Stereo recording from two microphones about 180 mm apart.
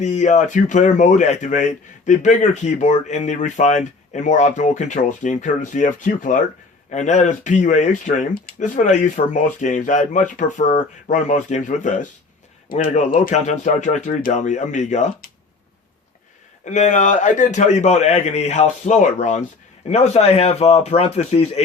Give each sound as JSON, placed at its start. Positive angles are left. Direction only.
{"t": 0.0, "sound": "a man's voice", "side_deg": 40}
{"t": 16.6, "sound": "a man's voice", "side_deg": 40}